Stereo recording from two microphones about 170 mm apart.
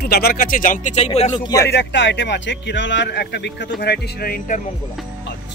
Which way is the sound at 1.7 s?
85° left.